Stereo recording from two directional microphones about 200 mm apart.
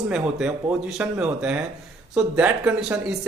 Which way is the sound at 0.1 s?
5° right (ahead or behind).